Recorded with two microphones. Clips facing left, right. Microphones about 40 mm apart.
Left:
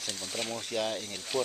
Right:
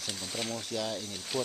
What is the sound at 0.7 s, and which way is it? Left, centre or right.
Speech, left.